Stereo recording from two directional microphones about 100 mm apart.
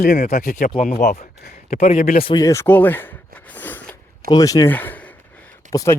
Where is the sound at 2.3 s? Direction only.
35° left (ahead or behind).